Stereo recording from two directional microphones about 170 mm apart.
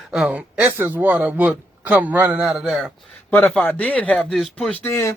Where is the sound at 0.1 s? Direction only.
5° right (ahead or behind).